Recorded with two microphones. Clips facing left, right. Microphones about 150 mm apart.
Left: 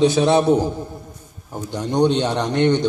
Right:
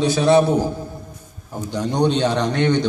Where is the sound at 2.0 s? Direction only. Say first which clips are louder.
Right 1 dB; 15° left (ahead or behind).